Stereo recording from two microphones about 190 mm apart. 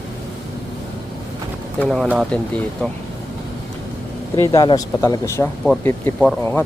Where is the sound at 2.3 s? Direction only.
5° left (ahead or behind).